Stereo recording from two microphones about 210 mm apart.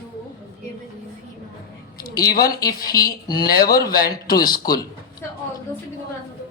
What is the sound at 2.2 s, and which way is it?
A man's voice, 45° left (ahead or behind).